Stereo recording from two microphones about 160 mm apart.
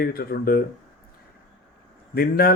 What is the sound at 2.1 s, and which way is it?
Speech, 70° left (ahead or behind).